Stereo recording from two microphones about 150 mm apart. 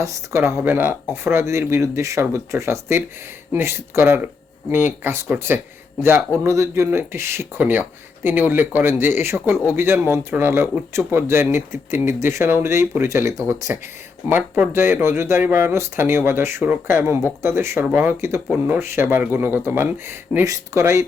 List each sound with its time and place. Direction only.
0.0 s speech: 20° right (ahead or behind)
14.3 s speech: 10° right (ahead or behind)
18.3 s speech: centre (ahead or behind)
18.7 s speech: 15° right (ahead or behind)